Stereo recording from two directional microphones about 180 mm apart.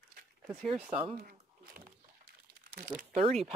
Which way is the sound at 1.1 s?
50° right (ahead or behind).